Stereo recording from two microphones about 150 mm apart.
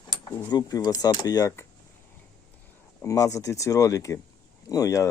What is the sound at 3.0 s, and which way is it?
Speech, 20° left (ahead or behind).